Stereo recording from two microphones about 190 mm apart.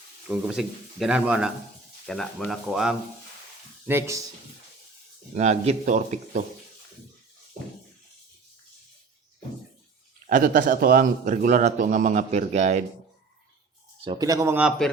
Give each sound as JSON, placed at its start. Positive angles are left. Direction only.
{"t": 0.3, "sound": "speech", "side_deg": -5}
{"t": 3.8, "sound": "speech", "side_deg": -15}
{"t": 5.3, "sound": "speech", "side_deg": -35}
{"t": 10.2, "sound": "a man's voice", "side_deg": -45}
{"t": 14.0, "sound": "speech", "side_deg": -25}